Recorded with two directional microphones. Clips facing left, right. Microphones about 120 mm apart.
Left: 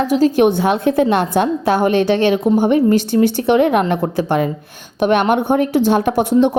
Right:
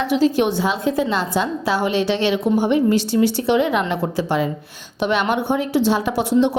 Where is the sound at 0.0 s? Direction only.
45° left (ahead or behind).